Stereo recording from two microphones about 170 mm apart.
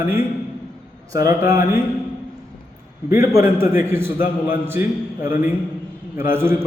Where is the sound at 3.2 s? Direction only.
15° right (ahead or behind).